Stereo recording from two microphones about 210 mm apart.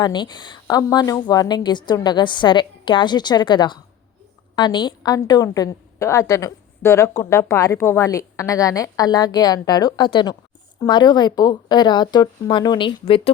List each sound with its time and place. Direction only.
0.0 s a woman's voice: 20° left (ahead or behind)